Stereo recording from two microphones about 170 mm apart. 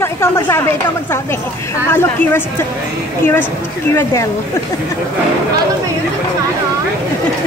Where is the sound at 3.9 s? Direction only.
15° left (ahead or behind).